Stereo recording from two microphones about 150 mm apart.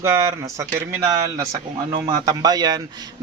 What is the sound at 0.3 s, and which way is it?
A man's voice, 20° right (ahead or behind).